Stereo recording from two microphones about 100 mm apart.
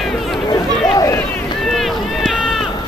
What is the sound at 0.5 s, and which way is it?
Run, 35° left (ahead or behind).